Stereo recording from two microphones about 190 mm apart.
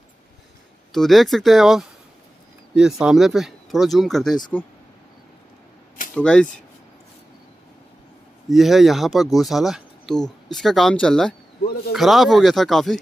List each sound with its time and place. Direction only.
0.9 s speech: centre (ahead or behind)
6.1 s speech: 5° left (ahead or behind)
8.5 s speech: centre (ahead or behind)
11.6 s a man's voice: 55° left (ahead or behind)
11.9 s speech: centre (ahead or behind)